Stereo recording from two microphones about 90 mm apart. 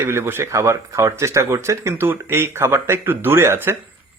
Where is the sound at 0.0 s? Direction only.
30° right (ahead or behind).